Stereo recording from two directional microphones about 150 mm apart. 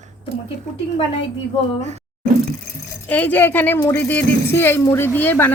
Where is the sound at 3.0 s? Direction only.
10° left (ahead or behind).